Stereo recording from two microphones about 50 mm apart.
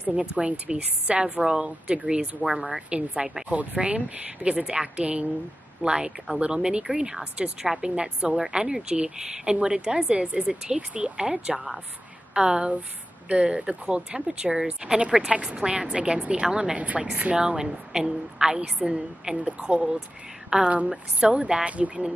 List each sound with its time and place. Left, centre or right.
0.4 s a woman's voice: right
2.4 s speech: centre
2.9 s a woman's voice: right
7.9 s a woman's voice: right
11.1 s a woman's voice: centre